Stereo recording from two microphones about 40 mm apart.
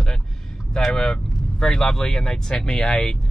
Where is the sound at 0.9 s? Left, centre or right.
Centre.